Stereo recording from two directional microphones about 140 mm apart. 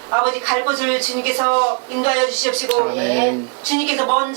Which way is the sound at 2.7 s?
25° right (ahead or behind).